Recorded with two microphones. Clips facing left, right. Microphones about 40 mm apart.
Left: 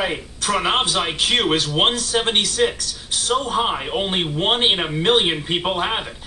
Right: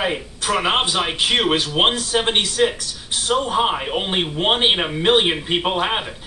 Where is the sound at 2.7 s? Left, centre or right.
Right.